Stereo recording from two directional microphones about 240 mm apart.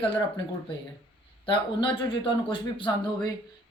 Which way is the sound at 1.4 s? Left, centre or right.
Left.